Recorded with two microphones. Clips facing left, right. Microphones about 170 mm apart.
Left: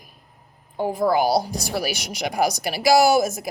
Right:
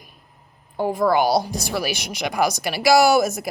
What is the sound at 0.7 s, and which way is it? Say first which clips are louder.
Speech: right 1 dB; 45° right (ahead or behind).